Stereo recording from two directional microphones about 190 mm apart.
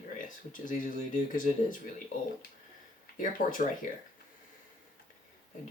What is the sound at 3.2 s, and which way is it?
Speech, 45° left (ahead or behind).